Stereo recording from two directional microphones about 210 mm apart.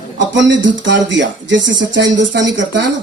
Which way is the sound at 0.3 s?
60° right (ahead or behind).